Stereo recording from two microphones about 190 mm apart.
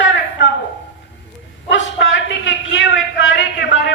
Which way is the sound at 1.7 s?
75° left (ahead or behind).